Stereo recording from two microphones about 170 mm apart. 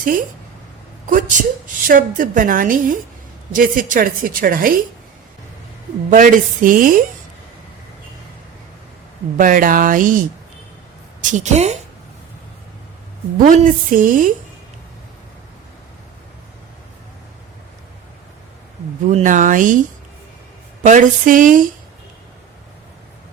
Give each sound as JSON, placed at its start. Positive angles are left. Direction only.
{"t": 0.0, "sound": "a woman's voice", "side_deg": -50}
{"t": 6.1, "sound": "a woman's voice", "side_deg": -50}
{"t": 9.4, "sound": "a woman's voice", "side_deg": -55}
{"t": 13.4, "sound": "a woman's voice", "side_deg": -50}
{"t": 19.0, "sound": "a woman's voice", "side_deg": -50}
{"t": 20.8, "sound": "a woman's voice", "side_deg": -50}